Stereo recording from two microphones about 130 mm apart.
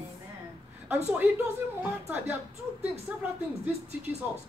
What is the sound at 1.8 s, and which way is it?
Speech, 15° right (ahead or behind).